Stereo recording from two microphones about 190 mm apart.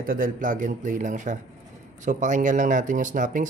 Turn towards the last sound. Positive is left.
turn(degrees=-40)  # may be behind; listen again after turning